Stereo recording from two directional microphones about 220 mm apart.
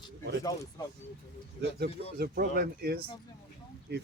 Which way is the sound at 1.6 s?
45° right (ahead or behind).